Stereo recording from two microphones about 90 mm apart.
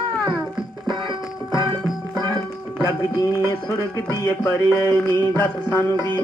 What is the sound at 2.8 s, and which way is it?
Music, 40° left (ahead or behind).